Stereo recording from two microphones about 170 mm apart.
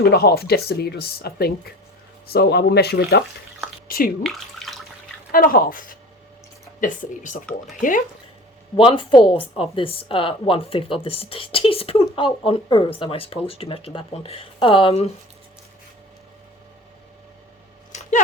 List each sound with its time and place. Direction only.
0.0 s speech: 70° left (ahead or behind)
3.8 s speech: 60° left (ahead or behind)
4.2 s speech: centre (ahead or behind)
5.3 s speech: 55° left (ahead or behind)
8.7 s speech: 30° left (ahead or behind)